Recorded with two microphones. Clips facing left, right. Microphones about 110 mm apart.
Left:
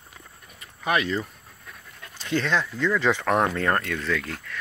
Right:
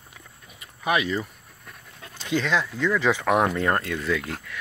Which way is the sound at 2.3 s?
5° right (ahead or behind).